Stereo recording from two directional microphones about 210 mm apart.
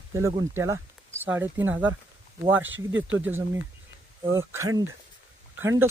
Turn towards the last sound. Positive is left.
turn(degrees=-10)  # may be behind; listen again after turning